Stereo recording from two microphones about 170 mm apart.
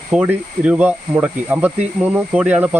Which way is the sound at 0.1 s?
10° right (ahead or behind).